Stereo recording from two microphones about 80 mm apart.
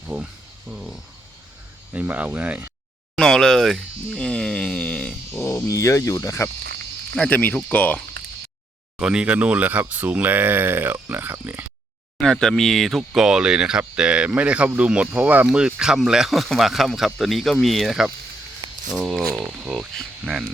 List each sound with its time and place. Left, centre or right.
0.1 s speech: right
0.7 s speech: centre
1.9 s speech: centre
3.2 s speech: centre
4.1 s speech: centre
5.3 s a sound: left
5.6 s speech: left
7.3 s speech: left
9.0 s speech: centre; by 11.6 s right
12.2 s speech: centre